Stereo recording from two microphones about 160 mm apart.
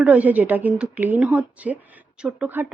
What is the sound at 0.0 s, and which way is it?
Speech, 10° right (ahead or behind).